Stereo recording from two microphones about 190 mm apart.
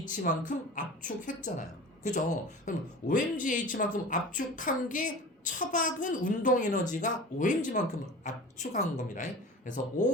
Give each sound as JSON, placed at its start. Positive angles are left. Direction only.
{"t": 0.1, "sound": "speech", "side_deg": 45}